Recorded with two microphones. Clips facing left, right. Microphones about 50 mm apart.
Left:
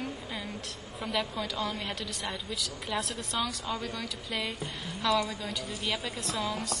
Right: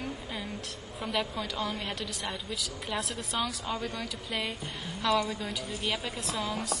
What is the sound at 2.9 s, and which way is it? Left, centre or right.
A woman's voice, centre.